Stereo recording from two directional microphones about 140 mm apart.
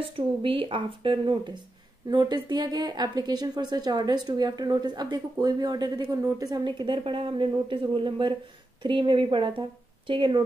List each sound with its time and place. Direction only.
0.0 s speech: 40° right (ahead or behind)